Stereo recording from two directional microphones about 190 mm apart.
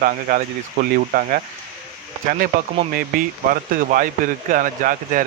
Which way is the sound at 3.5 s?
45° right (ahead or behind).